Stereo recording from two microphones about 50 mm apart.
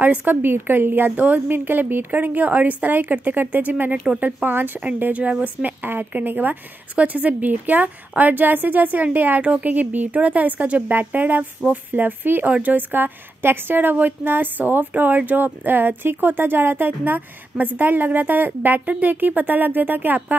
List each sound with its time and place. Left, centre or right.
0.0 s speech: right
0.4 s a woman's voice: right